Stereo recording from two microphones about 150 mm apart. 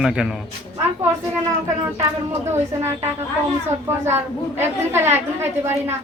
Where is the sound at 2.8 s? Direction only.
15° right (ahead or behind).